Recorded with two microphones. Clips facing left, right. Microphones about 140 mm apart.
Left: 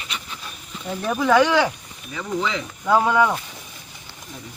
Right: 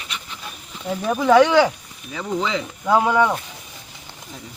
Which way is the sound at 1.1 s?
20° right (ahead or behind).